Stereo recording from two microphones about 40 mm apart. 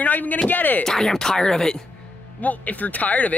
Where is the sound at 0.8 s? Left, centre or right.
Centre.